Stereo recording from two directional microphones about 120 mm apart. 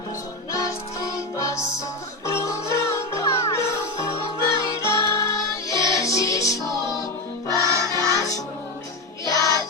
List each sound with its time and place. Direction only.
0.5 s music: 30° left (ahead or behind)
7.6 s music: 25° right (ahead or behind)
9.2 s music: 30° left (ahead or behind)